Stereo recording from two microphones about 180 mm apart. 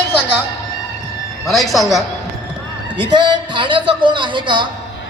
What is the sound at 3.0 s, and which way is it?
Speech, 25° right (ahead or behind).